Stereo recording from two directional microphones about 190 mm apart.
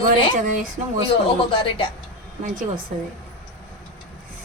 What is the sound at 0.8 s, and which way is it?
Speech, 35° right (ahead or behind).